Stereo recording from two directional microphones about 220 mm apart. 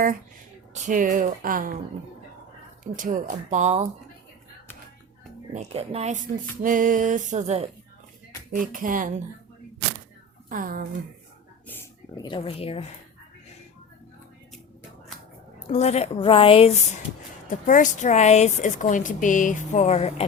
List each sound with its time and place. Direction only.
0.7 s speech: 35° right (ahead or behind)
2.8 s speech: 35° right (ahead or behind)
5.5 s speech: 30° right (ahead or behind)
10.5 s speech: 40° right (ahead or behind)
11.7 s speech: 15° left (ahead or behind)
15.7 s a woman's voice: 30° left (ahead or behind)